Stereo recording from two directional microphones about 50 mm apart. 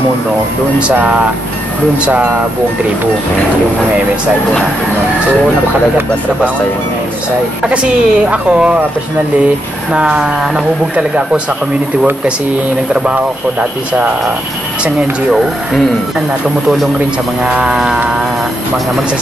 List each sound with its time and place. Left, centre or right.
2.0 s speech: right
7.6 s speech: right
9.9 s speech: centre
12.9 s speech: right